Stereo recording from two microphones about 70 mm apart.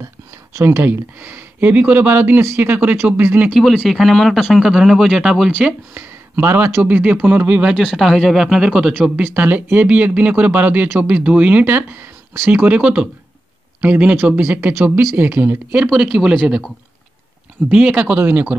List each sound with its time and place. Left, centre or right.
0.6 s speech: right
0.8 s speech: right
3.0 s speech: centre
3.5 s speech: centre
5.6 s speech: right
7.7 s speech: centre
9.1 s speech: right
14.7 s speech: right
15.1 s speech: right
17.6 s speech: centre